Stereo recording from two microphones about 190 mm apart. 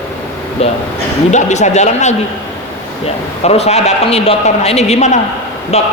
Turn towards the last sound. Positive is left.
turn(degrees=35)  # may be behind; listen again after turning